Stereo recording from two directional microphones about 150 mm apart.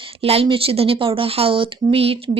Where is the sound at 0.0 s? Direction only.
40° right (ahead or behind).